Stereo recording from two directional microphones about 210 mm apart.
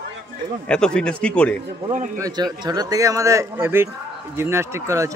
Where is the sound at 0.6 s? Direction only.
5° left (ahead or behind).